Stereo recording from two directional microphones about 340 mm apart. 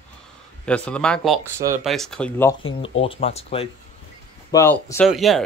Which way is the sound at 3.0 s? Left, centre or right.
Centre.